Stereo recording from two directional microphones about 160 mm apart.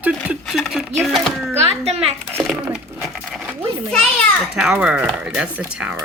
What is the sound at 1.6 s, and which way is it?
Speech, 40° right (ahead or behind).